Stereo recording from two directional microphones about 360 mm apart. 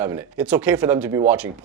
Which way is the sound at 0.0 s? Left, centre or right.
Centre.